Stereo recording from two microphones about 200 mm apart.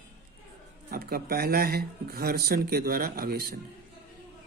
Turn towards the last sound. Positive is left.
turn(degrees=-50)  # may be behind; listen again after turning